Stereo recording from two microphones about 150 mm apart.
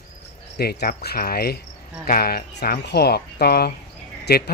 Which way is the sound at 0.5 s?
90° left.